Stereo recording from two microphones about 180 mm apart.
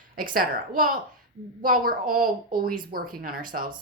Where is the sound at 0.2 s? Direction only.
55° right (ahead or behind).